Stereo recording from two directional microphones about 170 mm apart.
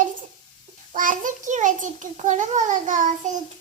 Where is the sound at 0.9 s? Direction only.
50° right (ahead or behind).